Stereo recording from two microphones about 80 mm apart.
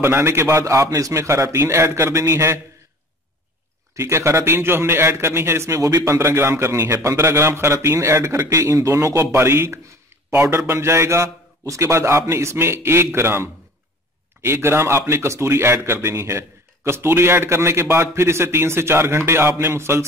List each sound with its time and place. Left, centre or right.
0.0 s speech: right
3.9 s speech: right
5.8 s speech: right
6.1 s speech: right